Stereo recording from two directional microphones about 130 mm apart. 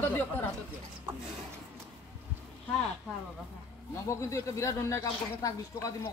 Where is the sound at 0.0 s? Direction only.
15° left (ahead or behind).